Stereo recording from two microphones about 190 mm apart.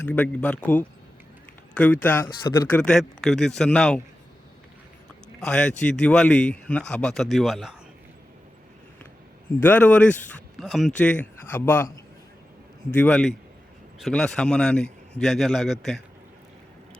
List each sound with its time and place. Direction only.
0.1 s speech: 10° left (ahead or behind)
2.2 s speech: 20° left (ahead or behind)
2.8 s speech: 5° left (ahead or behind)
5.4 s speech: 5° left (ahead or behind)
9.6 s speech: 10° left (ahead or behind)
12.9 s speech: 5° left (ahead or behind)